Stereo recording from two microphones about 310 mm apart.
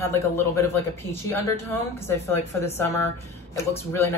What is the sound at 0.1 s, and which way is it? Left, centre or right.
Speech, centre.